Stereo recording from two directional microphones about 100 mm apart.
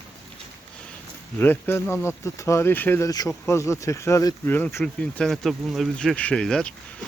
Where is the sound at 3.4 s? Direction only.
30° left (ahead or behind).